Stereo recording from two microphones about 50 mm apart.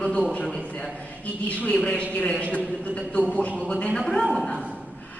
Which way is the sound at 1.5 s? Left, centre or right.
Left.